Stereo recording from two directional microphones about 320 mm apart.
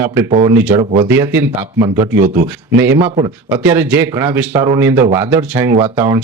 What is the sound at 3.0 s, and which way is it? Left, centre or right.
Speech, centre.